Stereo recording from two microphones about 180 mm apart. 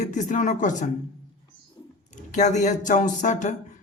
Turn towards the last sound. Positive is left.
turn(degrees=45)  # may be behind; listen again after turning